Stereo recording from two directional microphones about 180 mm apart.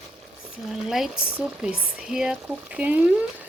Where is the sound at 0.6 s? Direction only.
Centre (ahead or behind).